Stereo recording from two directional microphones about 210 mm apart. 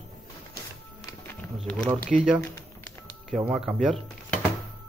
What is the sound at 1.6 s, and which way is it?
Speech, 5° left (ahead or behind).